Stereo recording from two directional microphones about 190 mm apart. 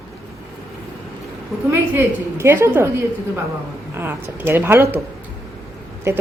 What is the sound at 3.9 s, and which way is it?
A woman's voice, 10° right (ahead or behind).